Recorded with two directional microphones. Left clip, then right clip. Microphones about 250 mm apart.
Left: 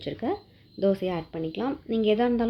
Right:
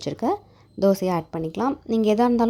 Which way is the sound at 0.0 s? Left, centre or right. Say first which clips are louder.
Right 6 dB; right.